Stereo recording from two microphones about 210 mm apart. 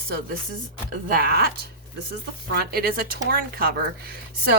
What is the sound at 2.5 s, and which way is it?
Speech, 50° right (ahead or behind).